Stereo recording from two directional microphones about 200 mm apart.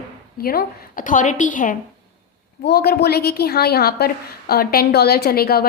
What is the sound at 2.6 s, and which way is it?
A woman's voice, 50° left (ahead or behind).